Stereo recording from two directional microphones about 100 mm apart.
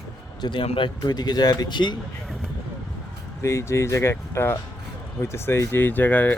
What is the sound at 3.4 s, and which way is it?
Speech, 30° left (ahead or behind).